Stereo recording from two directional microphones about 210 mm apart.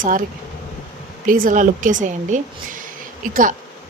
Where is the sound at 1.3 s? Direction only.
40° right (ahead or behind).